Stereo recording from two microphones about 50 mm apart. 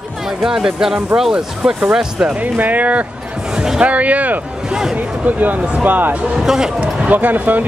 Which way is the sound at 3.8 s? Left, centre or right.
Right.